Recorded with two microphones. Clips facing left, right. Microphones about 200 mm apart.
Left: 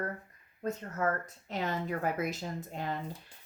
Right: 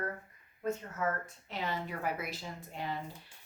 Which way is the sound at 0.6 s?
40° left (ahead or behind).